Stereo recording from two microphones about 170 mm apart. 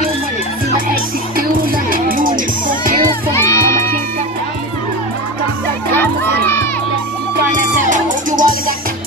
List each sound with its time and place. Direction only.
1.9 s music: 55° right (ahead or behind)
3.3 s music: 15° left (ahead or behind)
5.9 s crowd: 10° left (ahead or behind)
7.5 s music: 50° right (ahead or behind)